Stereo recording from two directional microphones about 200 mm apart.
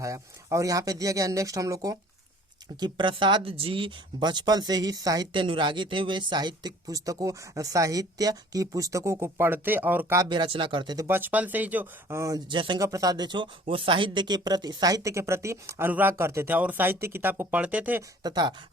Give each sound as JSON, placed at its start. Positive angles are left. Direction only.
{"t": 0.0, "sound": "speech", "side_deg": -15}
{"t": 18.2, "sound": "speech", "side_deg": -20}